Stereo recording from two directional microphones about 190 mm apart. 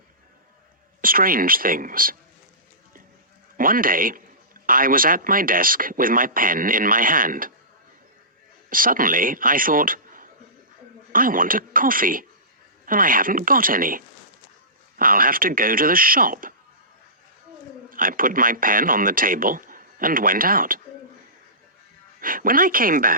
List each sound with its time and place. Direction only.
1.0 s speech: 50° right (ahead or behind)
3.6 s speech: 50° right (ahead or behind)
8.7 s a man's voice: 45° right (ahead or behind)
17.8 s speech: 45° right (ahead or behind)
22.2 s speech: 50° right (ahead or behind)